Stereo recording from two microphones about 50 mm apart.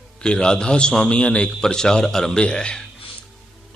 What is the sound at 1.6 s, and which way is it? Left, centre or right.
A man's voice, centre.